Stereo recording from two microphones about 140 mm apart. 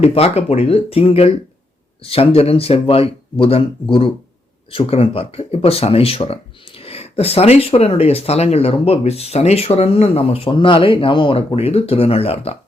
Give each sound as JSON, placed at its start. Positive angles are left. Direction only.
{"t": 0.0, "sound": "speech", "side_deg": 45}